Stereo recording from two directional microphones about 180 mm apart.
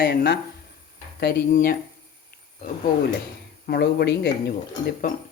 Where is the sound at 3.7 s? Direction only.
65° left (ahead or behind).